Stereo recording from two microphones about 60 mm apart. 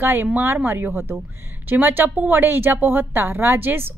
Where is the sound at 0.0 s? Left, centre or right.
Right.